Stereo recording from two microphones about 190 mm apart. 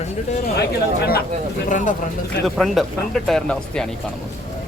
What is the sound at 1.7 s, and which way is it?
Speech, 40° left (ahead or behind).